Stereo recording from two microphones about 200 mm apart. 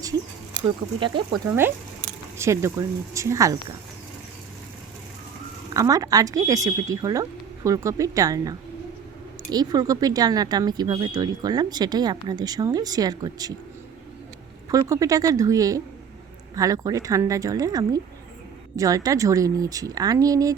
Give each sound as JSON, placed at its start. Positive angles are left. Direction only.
{"t": 0.9, "sound": "speech", "side_deg": -25}
{"t": 1.5, "sound": "speech", "side_deg": -10}
{"t": 5.7, "sound": "speech", "side_deg": -15}
{"t": 14.7, "sound": "speech", "side_deg": -15}